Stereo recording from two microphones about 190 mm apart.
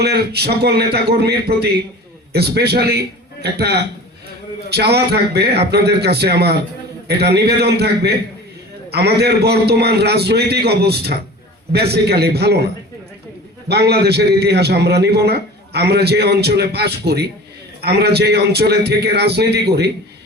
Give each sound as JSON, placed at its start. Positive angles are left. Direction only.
{"t": 0.0, "sound": "a man's voice", "side_deg": -60}
{"t": 13.7, "sound": "a man's voice", "side_deg": -60}